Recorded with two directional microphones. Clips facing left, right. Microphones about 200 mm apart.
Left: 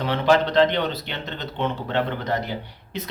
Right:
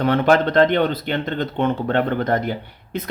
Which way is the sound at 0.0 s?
50° right (ahead or behind).